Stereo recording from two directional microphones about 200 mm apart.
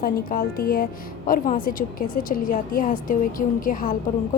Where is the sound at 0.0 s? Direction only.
45° left (ahead or behind).